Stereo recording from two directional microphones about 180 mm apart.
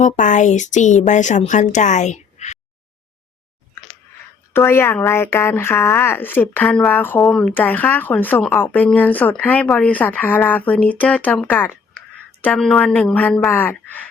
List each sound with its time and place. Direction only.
0.0 s speech: 45° left (ahead or behind)
4.5 s speech: 15° left (ahead or behind)